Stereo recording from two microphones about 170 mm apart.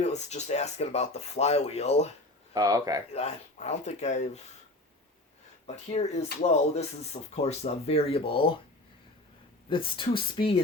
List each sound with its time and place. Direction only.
0.0 s speech: 40° left (ahead or behind)
2.5 s speech: 20° right (ahead or behind)
3.1 s speech: 40° left (ahead or behind)
5.6 s speech: 40° left (ahead or behind)
9.6 s speech: 30° left (ahead or behind)